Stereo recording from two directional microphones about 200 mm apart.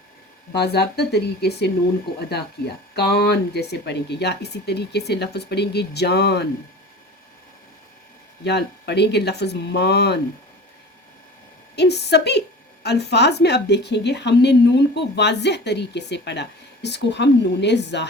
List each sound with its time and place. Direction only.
0.5 s a woman's voice: 55° left (ahead or behind)
8.4 s a woman's voice: 55° left (ahead or behind)
11.8 s a woman's voice: 55° left (ahead or behind)